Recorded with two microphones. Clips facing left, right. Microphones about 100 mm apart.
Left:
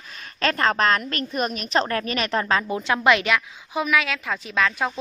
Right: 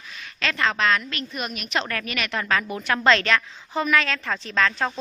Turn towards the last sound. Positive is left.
turn(degrees=10)  # may be behind; listen again after turning